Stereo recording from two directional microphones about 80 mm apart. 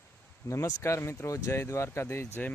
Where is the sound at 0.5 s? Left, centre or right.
Left.